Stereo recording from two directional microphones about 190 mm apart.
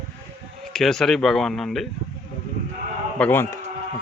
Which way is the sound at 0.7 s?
Centre (ahead or behind).